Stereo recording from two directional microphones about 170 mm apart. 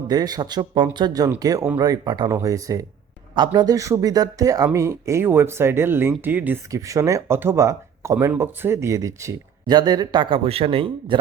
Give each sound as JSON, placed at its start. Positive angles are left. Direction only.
{"t": 0.1, "sound": "speech", "side_deg": -25}